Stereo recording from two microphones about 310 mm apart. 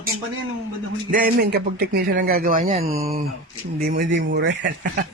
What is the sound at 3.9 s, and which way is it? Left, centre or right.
Speech, right.